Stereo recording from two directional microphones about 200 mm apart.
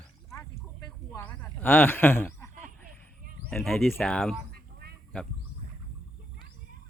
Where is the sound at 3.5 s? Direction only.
Centre (ahead or behind).